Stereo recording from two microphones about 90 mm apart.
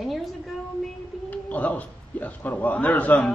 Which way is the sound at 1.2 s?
20° left (ahead or behind).